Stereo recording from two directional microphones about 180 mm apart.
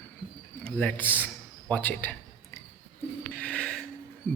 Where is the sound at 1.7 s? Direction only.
10° left (ahead or behind).